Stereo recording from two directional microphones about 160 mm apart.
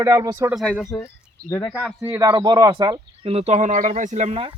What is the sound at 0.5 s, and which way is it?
Speech, 5° left (ahead or behind).